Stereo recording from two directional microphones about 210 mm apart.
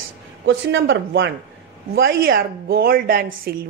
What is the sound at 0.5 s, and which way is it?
Speech, 60° right (ahead or behind).